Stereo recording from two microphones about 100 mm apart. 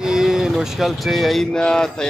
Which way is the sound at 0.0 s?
5° right (ahead or behind).